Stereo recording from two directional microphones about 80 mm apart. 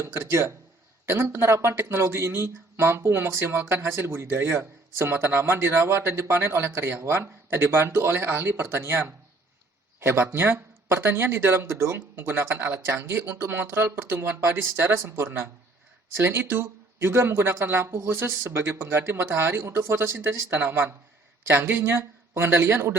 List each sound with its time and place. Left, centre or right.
0.0 s speech: right